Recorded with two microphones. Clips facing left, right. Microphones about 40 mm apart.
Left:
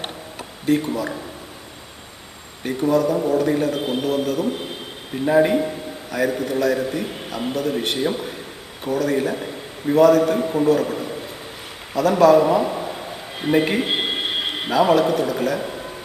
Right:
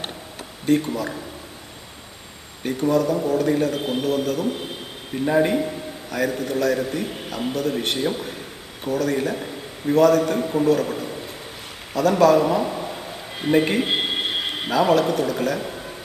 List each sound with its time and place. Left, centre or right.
0.7 s a man's voice: centre
2.6 s a man's voice: centre